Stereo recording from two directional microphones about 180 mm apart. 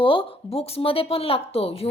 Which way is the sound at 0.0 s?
30° left (ahead or behind).